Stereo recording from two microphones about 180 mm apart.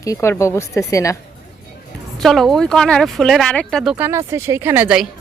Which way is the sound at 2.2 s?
Centre (ahead or behind).